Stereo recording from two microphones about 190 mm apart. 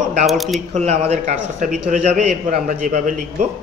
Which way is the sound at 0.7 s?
35° right (ahead or behind).